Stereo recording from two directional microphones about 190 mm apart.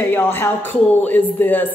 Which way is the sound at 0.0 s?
10° left (ahead or behind).